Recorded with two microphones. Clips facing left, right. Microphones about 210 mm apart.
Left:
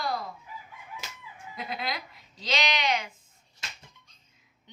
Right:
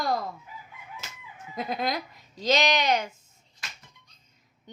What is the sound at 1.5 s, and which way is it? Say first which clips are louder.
Speech: right 6 dB; 45° right (ahead or behind).